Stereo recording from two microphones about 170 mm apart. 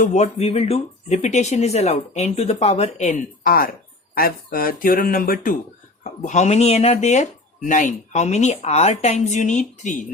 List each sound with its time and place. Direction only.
0.0 s speech: 45° left (ahead or behind)
6.0 s speech: 45° left (ahead or behind)